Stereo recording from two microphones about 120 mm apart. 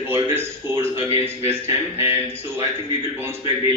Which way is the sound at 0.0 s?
20° right (ahead or behind).